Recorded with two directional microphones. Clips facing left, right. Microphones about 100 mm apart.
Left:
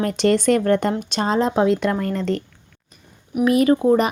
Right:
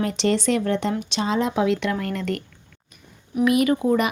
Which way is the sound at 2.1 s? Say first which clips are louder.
Left 4 dB; 30° left (ahead or behind).